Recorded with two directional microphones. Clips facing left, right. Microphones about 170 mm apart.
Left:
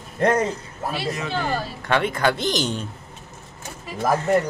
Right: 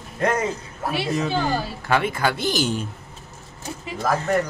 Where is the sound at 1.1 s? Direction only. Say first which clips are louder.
Right 3 dB; 5° right (ahead or behind).